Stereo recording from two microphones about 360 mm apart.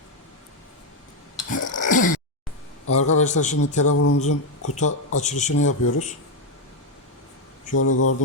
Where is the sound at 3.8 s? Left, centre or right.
Left.